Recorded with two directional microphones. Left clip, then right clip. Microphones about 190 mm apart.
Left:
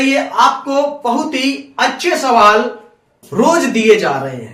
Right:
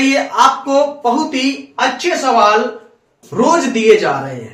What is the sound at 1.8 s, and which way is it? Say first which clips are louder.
Speech: left 1 dB; 10° left (ahead or behind).